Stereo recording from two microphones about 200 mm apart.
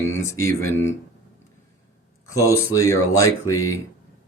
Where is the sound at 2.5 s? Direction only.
15° left (ahead or behind).